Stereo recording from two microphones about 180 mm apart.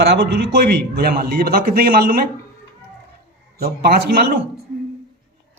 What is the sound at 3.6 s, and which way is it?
Speech, 55° right (ahead or behind).